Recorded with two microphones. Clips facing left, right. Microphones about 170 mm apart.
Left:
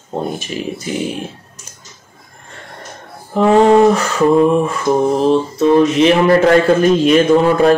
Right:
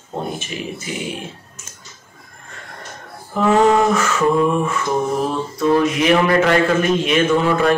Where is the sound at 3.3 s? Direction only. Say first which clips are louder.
Left 5 dB; 35° left (ahead or behind).